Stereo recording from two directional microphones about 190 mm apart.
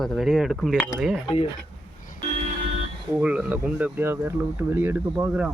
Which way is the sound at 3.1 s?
5° right (ahead or behind).